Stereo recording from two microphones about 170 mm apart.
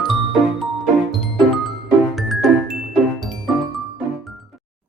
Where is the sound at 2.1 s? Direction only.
Centre (ahead or behind).